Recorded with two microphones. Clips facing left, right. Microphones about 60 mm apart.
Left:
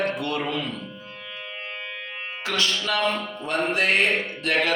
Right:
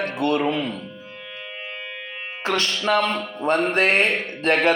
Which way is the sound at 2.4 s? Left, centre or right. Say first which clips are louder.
Right 3 dB; right.